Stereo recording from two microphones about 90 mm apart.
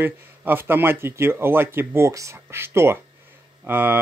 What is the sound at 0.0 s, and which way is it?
Speech, 25° right (ahead or behind).